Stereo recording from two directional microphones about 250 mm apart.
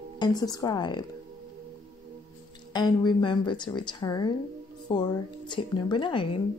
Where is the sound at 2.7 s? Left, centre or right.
Centre.